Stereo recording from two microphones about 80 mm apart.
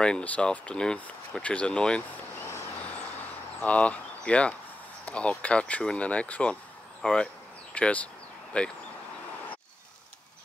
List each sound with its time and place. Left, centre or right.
0.0 s speech: centre
3.6 s speech: centre